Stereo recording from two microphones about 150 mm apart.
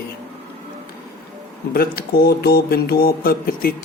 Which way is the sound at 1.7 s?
90° left.